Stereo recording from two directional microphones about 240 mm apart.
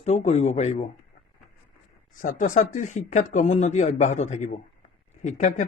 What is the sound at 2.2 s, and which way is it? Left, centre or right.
Speech, left.